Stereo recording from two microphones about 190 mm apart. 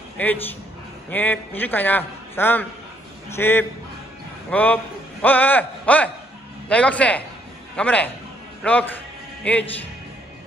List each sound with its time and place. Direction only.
0.2 s a man's voice: 10° left (ahead or behind)
9.4 s a man's voice: 5° left (ahead or behind)